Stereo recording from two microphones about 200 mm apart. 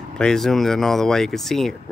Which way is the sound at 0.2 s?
Centre (ahead or behind).